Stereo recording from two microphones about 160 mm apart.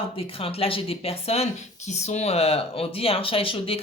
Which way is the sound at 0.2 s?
35° left (ahead or behind).